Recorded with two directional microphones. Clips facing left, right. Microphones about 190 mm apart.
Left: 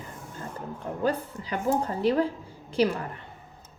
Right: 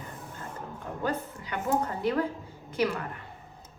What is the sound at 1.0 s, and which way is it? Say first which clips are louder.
A woman's voice: left 4 dB; 30° left (ahead or behind).